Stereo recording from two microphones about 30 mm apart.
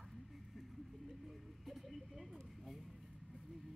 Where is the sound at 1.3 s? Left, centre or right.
Centre.